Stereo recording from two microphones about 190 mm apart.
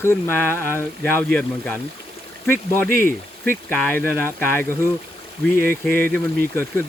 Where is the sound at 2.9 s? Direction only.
50° right (ahead or behind).